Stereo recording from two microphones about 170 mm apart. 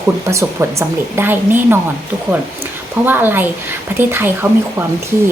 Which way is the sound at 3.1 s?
10° right (ahead or behind).